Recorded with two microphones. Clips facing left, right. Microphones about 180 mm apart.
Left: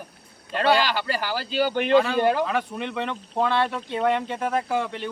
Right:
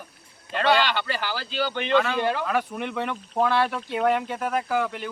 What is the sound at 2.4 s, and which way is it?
Speech, 5° right (ahead or behind).